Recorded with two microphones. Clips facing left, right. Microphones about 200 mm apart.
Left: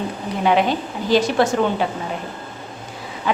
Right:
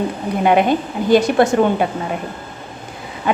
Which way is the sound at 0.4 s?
50° right (ahead or behind).